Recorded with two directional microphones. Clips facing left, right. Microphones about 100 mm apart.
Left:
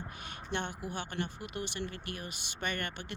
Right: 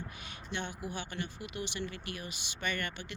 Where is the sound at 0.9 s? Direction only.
50° left (ahead or behind).